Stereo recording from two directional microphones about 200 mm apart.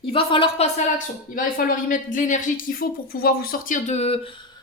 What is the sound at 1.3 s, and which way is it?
Speech, 45° left (ahead or behind).